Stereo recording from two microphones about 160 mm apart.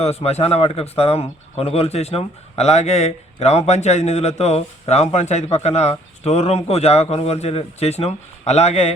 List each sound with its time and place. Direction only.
0.0 s speech: 40° left (ahead or behind)